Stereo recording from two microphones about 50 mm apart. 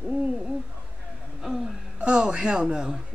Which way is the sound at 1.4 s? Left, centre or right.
Centre.